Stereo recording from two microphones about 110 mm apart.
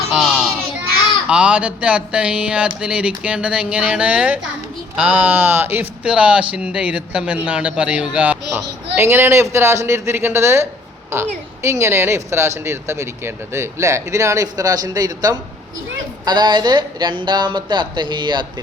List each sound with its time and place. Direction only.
0.1 s child singing: centre (ahead or behind)
1.3 s speech: 10° right (ahead or behind)
9.0 s speech: 25° right (ahead or behind); by 18.4 s 45° right (ahead or behind)